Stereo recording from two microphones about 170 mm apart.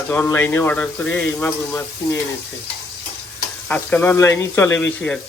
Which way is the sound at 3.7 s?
10° left (ahead or behind).